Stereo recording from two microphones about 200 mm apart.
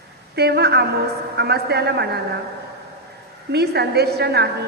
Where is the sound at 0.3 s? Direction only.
55° right (ahead or behind).